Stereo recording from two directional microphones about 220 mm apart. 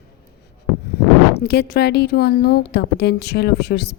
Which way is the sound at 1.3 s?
45° left (ahead or behind).